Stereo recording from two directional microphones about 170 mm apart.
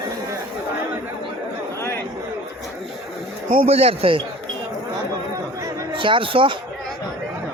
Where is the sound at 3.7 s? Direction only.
35° right (ahead or behind).